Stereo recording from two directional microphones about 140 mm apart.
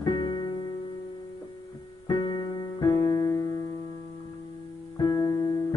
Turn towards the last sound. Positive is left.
turn(degrees=25)  # may be behind; listen again after turning